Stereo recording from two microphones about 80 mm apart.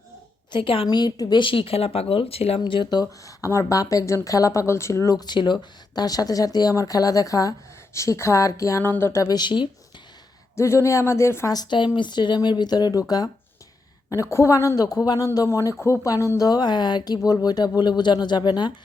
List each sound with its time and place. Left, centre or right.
0.5 s speech: left
2.6 s speech: left
3.0 s speech: left
5.1 s speech: left
8.8 s speech: left
9.3 s speech: left
10.5 s speech: left
11.5 s speech: left
14.1 s speech: left
16.4 s speech: left